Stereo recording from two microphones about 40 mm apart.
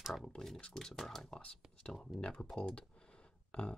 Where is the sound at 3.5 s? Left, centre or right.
Left.